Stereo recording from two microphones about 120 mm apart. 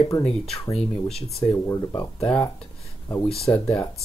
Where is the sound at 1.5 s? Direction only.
30° left (ahead or behind).